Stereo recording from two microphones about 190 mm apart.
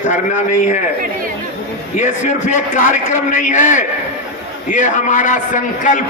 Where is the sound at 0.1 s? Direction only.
40° left (ahead or behind).